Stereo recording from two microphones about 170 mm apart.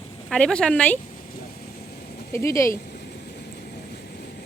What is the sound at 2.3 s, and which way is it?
Speech, 15° left (ahead or behind).